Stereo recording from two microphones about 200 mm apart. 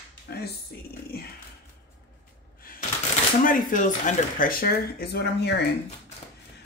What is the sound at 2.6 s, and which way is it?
Shuffling cards, 45° left (ahead or behind).